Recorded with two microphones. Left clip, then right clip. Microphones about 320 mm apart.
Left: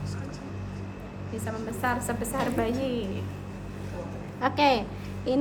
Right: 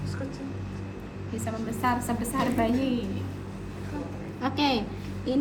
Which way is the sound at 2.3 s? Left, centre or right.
Centre.